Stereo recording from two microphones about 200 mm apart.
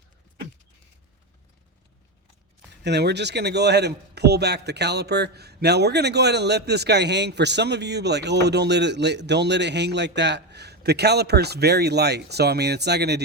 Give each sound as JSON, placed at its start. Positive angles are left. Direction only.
{"t": 2.8, "sound": "a man's voice", "side_deg": -55}